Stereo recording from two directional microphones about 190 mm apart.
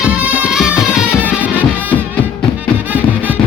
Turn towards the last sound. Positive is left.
turn(degrees=-10)  # may be behind; listen again after turning